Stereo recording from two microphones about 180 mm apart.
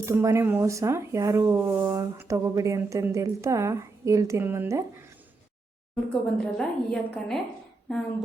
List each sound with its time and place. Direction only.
0.0 s speech: 15° right (ahead or behind)
6.1 s a woman's voice: 5° left (ahead or behind)